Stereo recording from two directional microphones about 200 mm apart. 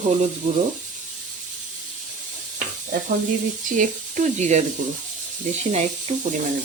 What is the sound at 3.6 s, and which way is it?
Speech, 40° right (ahead or behind).